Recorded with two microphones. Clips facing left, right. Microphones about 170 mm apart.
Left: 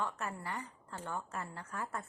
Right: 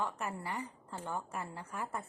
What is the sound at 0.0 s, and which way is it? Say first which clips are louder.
A woman's voice: right 1 dB; 10° right (ahead or behind).